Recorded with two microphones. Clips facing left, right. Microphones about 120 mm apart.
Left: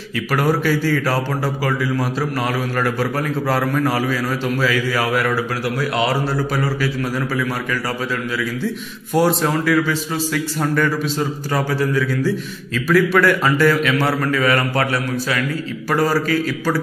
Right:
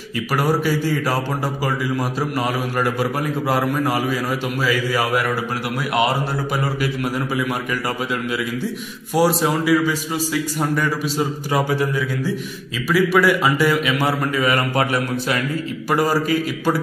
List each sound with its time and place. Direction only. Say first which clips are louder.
0.3 s a man's voice: left 1 dB; 10° right (ahead or behind)
2.8 s a man's voice: even; 15° right (ahead or behind)
9.1 s a man's voice: left 1 dB; 5° right (ahead or behind)